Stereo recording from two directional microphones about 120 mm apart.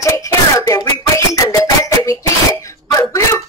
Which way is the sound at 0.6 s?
25° left (ahead or behind).